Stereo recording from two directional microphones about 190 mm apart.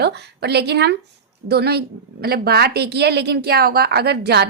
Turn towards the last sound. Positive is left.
turn(degrees=-60)  # may be behind; listen again after turning